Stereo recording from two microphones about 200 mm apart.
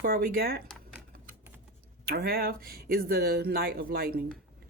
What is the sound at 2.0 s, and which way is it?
Speech, 50° right (ahead or behind).